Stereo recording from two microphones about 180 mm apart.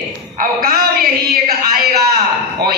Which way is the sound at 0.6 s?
55° right (ahead or behind).